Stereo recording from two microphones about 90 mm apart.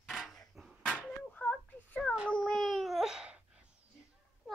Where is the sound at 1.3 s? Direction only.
15° left (ahead or behind); by 3.4 s 10° right (ahead or behind).